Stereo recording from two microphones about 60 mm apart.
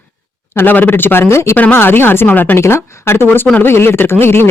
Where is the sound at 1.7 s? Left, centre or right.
Left.